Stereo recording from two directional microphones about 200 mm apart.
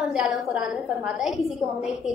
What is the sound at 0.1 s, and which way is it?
A woman's voice, 5° right (ahead or behind).